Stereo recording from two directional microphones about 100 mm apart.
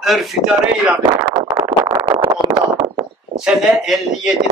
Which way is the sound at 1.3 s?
55° right (ahead or behind).